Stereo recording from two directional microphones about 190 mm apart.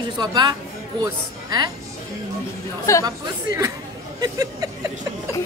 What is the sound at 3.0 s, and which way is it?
Speech, 20° right (ahead or behind).